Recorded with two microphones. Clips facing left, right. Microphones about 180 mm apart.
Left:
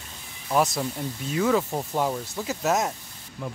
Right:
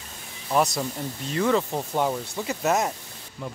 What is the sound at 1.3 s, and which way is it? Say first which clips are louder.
A man's voice: even; 5° left (ahead or behind).